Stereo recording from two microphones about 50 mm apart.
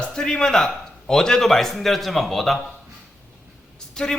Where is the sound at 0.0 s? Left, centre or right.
Centre.